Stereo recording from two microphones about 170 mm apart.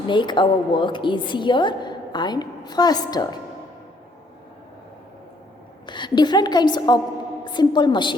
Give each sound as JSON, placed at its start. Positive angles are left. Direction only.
{"t": 0.1, "sound": "a woman's voice", "side_deg": 30}
{"t": 5.8, "sound": "a woman's voice", "side_deg": 25}